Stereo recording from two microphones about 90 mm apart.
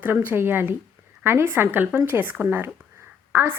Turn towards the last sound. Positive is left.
turn(degrees=-25)  # may be behind; listen again after turning